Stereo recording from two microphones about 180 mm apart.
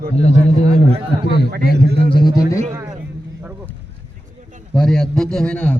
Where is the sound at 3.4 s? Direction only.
10° right (ahead or behind).